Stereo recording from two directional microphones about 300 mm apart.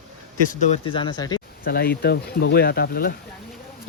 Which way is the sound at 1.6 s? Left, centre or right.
Left.